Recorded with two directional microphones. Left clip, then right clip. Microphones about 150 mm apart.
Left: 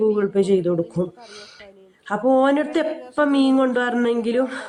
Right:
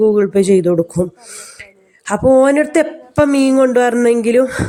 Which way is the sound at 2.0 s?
35° right (ahead or behind).